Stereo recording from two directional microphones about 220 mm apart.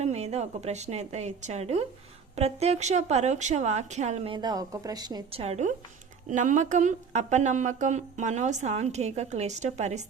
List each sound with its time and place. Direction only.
0.0 s a woman's voice: 30° right (ahead or behind)